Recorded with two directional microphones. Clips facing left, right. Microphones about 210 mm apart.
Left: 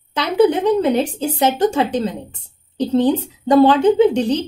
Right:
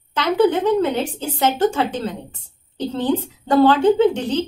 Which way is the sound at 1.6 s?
15° left (ahead or behind).